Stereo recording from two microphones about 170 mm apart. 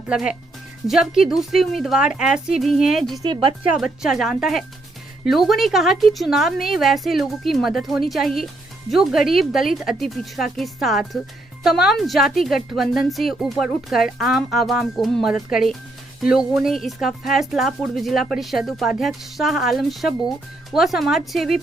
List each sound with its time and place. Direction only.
0.1 s a woman's voice: 5° right (ahead or behind)
3.2 s speech: 30° right (ahead or behind)
3.8 s a woman's voice: centre (ahead or behind)